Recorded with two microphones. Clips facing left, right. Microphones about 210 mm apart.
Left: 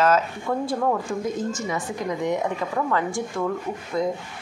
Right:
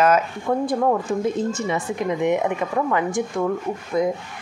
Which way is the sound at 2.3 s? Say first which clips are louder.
Right 4 dB; 20° right (ahead or behind).